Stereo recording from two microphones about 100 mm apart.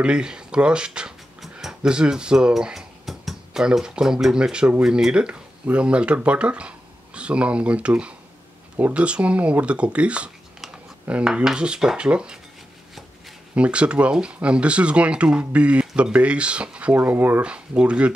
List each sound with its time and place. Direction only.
0.0 s speech: 10° right (ahead or behind)
13.6 s speech: 10° right (ahead or behind)